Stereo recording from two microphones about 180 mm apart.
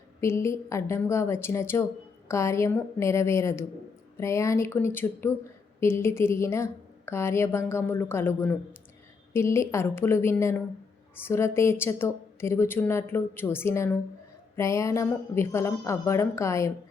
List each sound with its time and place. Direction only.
0.2 s a woman's voice: 15° left (ahead or behind)